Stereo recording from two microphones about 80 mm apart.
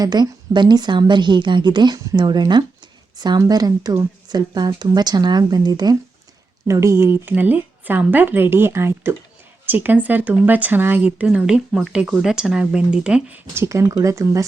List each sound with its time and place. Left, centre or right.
0.0 s a woman's voice: right
6.7 s a woman's voice: right; by 13.4 s centre
13.5 s speech: right